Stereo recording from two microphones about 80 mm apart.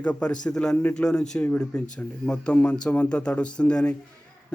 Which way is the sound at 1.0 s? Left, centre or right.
Centre.